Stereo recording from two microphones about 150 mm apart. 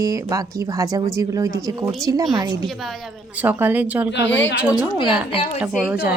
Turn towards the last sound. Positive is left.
turn(degrees=-10)  # may be behind; listen again after turning